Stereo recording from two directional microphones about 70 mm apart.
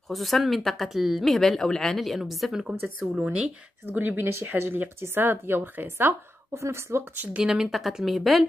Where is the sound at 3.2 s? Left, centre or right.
Centre.